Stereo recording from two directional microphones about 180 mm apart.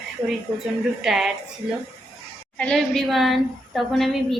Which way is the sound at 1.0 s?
5° right (ahead or behind).